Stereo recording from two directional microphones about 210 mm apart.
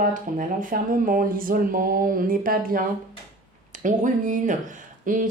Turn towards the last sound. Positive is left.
turn(degrees=-40)  # may be behind; listen again after turning